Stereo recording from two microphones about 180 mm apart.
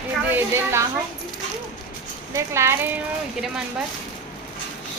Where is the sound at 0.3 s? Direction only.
10° right (ahead or behind).